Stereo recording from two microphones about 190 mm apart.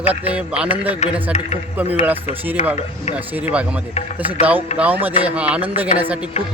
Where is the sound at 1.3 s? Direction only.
35° left (ahead or behind).